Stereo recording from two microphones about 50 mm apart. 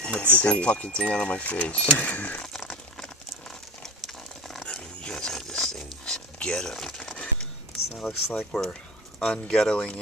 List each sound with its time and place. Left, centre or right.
0.0 s speech: left
3.8 s a sound: centre
8.0 s speech: centre
8.5 s speech: centre